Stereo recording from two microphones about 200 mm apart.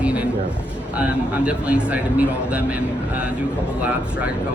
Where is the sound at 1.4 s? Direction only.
5° right (ahead or behind).